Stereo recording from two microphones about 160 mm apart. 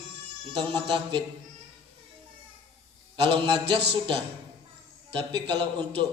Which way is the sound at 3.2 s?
35° right (ahead or behind).